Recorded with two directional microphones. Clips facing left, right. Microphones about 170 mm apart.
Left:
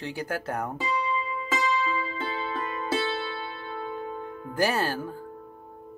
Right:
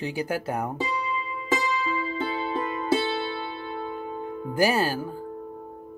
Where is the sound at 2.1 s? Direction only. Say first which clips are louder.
Right 4 dB; 30° right (ahead or behind).